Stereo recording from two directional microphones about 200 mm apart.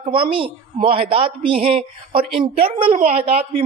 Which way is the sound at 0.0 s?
25° right (ahead or behind).